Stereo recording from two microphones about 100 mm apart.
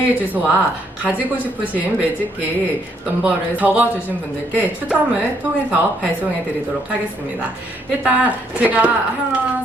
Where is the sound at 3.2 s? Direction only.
15° right (ahead or behind).